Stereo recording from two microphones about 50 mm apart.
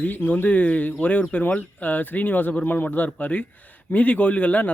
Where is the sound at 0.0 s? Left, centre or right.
Left.